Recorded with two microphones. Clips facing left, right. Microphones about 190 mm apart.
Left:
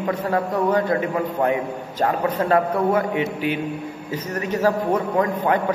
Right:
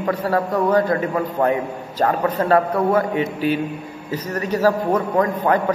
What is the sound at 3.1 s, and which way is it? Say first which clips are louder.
Speech: right 2 dB; 40° right (ahead or behind).